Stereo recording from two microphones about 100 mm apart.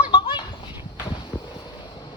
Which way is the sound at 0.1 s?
55° left (ahead or behind).